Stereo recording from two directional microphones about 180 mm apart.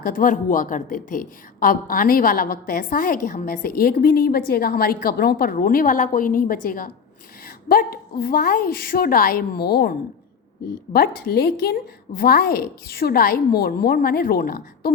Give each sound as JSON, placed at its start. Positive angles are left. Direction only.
{"t": 0.0, "sound": "a woman's voice", "side_deg": 50}
{"t": 10.9, "sound": "a woman's voice", "side_deg": 55}